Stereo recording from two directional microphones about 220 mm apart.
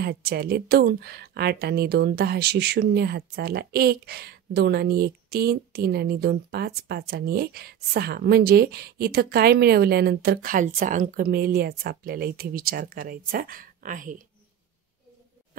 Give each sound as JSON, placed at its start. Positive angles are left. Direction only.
{"t": 0.0, "sound": "a woman's voice", "side_deg": -45}